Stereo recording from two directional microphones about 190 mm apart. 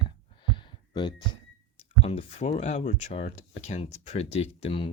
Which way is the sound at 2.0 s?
30° left (ahead or behind).